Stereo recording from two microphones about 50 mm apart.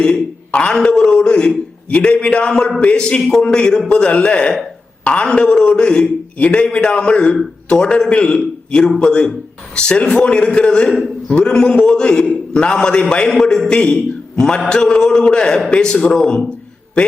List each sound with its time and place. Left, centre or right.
0.0 s a man's voice: left